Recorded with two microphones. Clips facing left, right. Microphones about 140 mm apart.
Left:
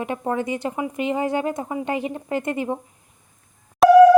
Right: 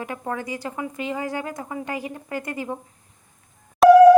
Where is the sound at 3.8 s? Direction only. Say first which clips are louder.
Right 2 dB; centre (ahead or behind).